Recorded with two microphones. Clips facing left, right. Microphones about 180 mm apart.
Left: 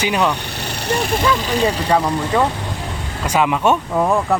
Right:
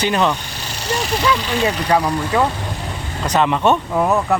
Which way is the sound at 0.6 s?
55° left (ahead or behind).